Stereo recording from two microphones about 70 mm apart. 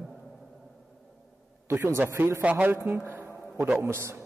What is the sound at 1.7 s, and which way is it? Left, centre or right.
Speech, right.